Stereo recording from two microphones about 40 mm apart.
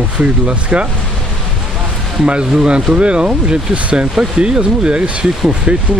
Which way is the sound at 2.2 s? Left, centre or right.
Right.